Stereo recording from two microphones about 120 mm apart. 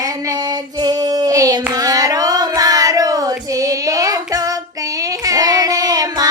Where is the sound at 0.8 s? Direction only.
35° right (ahead or behind).